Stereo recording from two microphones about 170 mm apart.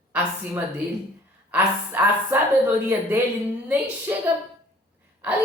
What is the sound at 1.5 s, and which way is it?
A man's voice, 10° right (ahead or behind).